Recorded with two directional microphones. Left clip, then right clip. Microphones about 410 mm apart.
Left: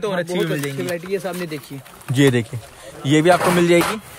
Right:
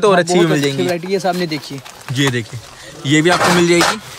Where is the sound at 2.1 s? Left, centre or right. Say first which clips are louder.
Left 1 dB; centre.